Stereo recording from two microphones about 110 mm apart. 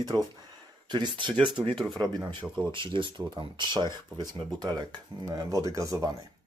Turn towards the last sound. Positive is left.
turn(degrees=-30)  # may be behind; listen again after turning